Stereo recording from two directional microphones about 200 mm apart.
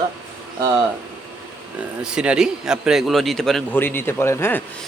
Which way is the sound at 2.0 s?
5° right (ahead or behind).